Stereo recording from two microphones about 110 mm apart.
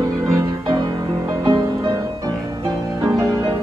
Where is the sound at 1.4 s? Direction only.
45° right (ahead or behind).